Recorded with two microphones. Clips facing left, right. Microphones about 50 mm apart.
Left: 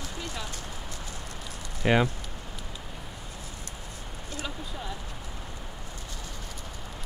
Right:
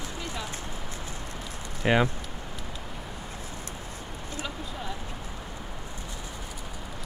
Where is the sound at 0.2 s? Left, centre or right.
Right.